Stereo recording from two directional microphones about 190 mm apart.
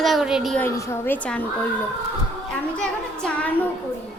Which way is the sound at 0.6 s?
15° left (ahead or behind).